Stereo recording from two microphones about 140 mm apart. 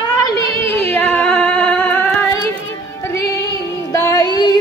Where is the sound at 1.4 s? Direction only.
10° left (ahead or behind).